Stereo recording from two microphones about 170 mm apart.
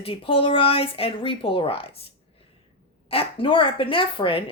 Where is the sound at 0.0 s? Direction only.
35° left (ahead or behind).